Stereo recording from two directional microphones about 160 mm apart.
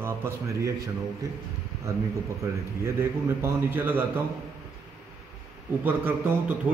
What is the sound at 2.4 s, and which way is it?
A man's voice, 15° right (ahead or behind).